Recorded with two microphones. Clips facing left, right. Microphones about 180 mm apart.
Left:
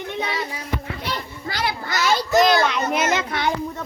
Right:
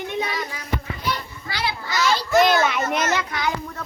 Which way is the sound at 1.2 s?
45° left (ahead or behind).